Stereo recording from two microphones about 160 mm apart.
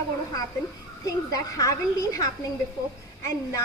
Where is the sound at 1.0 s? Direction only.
20° left (ahead or behind).